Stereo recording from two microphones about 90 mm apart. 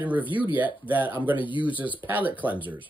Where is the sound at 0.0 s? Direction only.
20° right (ahead or behind).